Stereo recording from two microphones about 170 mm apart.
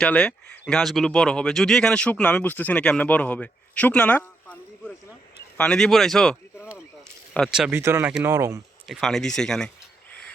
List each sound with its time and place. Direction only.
0.0 s speech: 5° left (ahead or behind)
7.3 s speech: centre (ahead or behind)
7.8 s speech: 15° right (ahead or behind)
8.9 s speech: centre (ahead or behind)